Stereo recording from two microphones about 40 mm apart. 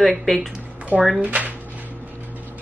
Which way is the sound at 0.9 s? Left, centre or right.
Right.